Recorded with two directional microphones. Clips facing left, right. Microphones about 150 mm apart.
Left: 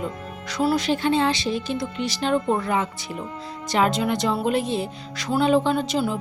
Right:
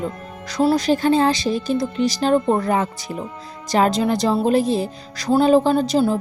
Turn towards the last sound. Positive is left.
turn(degrees=-35)  # may be behind; listen again after turning